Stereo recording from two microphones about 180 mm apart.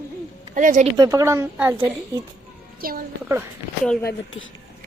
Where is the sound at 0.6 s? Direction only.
45° right (ahead or behind).